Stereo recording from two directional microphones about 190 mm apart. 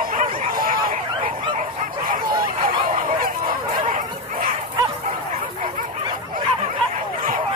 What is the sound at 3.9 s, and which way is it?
Bow-wow, 45° right (ahead or behind).